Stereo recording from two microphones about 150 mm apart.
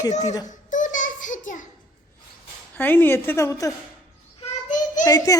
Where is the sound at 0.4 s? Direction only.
60° left (ahead or behind).